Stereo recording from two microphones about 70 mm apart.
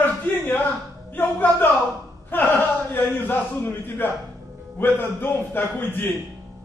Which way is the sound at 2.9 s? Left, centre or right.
Left.